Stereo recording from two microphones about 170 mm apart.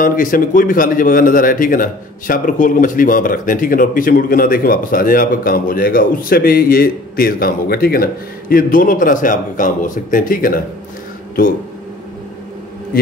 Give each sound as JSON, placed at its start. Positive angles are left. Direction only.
{"t": 0.0, "sound": "a man's voice", "side_deg": 55}
{"t": 12.9, "sound": "a man's voice", "side_deg": 60}